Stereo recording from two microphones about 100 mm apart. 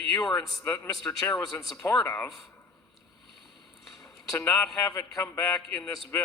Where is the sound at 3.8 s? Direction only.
Centre (ahead or behind).